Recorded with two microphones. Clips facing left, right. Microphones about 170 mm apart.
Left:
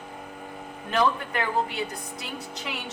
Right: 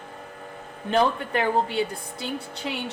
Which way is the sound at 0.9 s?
30° right (ahead or behind).